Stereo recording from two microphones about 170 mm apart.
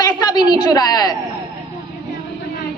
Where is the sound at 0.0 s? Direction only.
25° left (ahead or behind).